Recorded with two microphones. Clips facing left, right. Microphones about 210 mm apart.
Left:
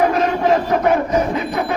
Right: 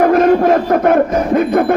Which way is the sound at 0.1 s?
55° right (ahead or behind).